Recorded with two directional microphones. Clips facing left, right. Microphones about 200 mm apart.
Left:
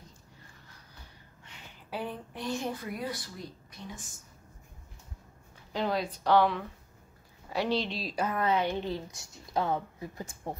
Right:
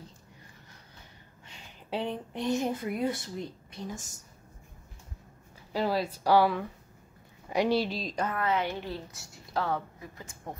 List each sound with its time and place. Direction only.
1.9 s speech: 25° right (ahead or behind)
3.8 s speech: 40° right (ahead or behind)
5.7 s a woman's voice: 5° right (ahead or behind)
8.0 s a woman's voice: 5° left (ahead or behind)
10.1 s speech: 40° left (ahead or behind)